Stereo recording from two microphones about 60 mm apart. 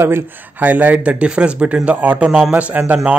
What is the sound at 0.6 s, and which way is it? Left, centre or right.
Speech, right.